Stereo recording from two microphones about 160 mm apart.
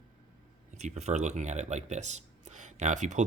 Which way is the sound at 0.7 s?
45° right (ahead or behind).